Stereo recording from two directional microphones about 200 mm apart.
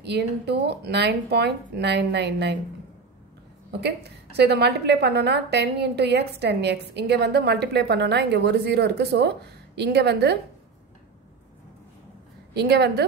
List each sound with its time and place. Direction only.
0.0 s a woman's voice: 55° right (ahead or behind)
4.4 s a woman's voice: 55° right (ahead or behind)
12.5 s a woman's voice: 55° right (ahead or behind)